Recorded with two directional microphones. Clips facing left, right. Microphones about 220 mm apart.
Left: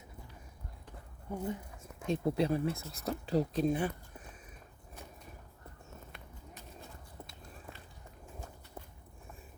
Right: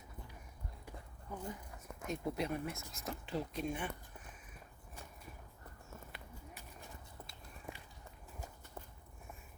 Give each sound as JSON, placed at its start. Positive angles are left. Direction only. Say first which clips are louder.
{"t": 1.3, "sound": "speech", "louder": "left 7 dB", "side_deg": 25}
{"t": 6.1, "sound": "clip-clop", "louder": "left 1 dB", "side_deg": -5}
{"t": 7.7, "sound": "run", "louder": "right 3 dB", "side_deg": -15}